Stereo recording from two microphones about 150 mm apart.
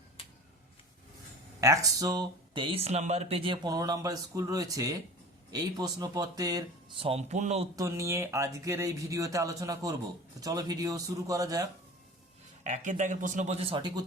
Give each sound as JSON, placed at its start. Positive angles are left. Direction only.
{"t": 1.6, "sound": "speech", "side_deg": -20}
{"t": 7.0, "sound": "speech", "side_deg": -45}
{"t": 7.8, "sound": "speech", "side_deg": -20}
{"t": 12.6, "sound": "speech", "side_deg": -55}